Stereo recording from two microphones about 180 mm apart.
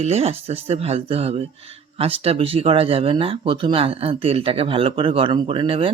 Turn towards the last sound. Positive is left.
turn(degrees=-30)  # may be behind; listen again after turning